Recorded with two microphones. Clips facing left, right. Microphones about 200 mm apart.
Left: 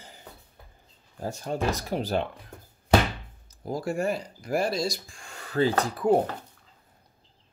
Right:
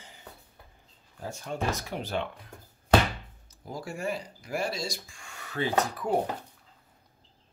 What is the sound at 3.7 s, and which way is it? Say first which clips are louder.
Speech: left 6 dB; 45° left (ahead or behind).